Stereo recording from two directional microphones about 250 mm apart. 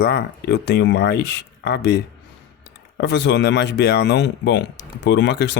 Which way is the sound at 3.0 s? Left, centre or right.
Left.